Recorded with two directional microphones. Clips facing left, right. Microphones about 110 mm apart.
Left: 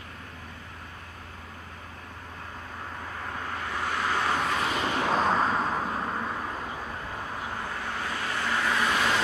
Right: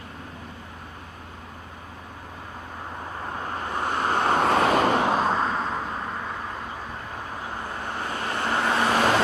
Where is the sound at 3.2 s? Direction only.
30° right (ahead or behind); by 5.0 s 55° right (ahead or behind).